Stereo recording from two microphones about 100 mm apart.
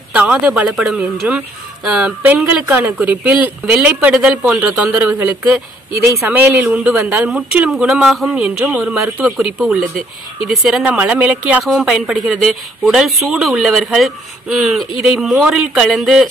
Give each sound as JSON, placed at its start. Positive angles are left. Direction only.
{"t": 0.1, "sound": "speech", "side_deg": -10}
{"t": 4.1, "sound": "speech", "side_deg": -5}
{"t": 4.9, "sound": "speech", "side_deg": -15}
{"t": 5.9, "sound": "speech", "side_deg": -30}